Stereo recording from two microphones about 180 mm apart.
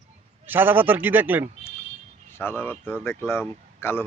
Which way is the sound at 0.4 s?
10° right (ahead or behind).